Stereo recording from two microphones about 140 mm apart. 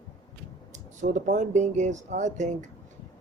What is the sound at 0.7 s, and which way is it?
Speech, 60° right (ahead or behind).